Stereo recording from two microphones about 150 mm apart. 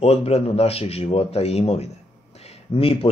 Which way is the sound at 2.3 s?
45° left (ahead or behind).